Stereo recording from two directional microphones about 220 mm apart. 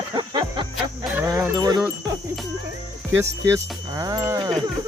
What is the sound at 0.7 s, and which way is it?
Speech, 5° right (ahead or behind).